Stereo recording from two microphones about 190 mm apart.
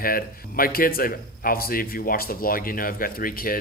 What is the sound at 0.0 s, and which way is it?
A man's voice, 50° left (ahead or behind).